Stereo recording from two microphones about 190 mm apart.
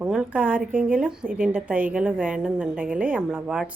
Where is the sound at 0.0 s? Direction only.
5° right (ahead or behind).